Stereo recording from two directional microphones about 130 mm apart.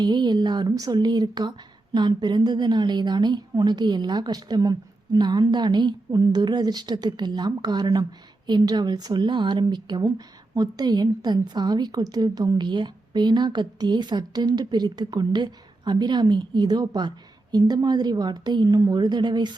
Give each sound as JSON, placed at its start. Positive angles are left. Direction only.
{"t": 0.0, "sound": "speech", "side_deg": -35}